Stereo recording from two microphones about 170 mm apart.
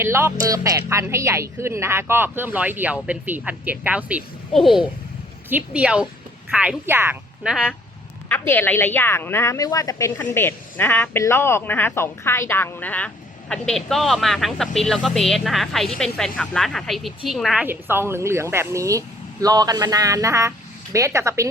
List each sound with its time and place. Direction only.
0.0 s speech: 15° right (ahead or behind)
8.3 s speech: 10° left (ahead or behind); by 21.5 s 15° right (ahead or behind)